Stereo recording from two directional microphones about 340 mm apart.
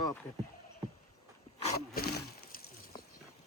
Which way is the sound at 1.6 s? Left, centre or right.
Left.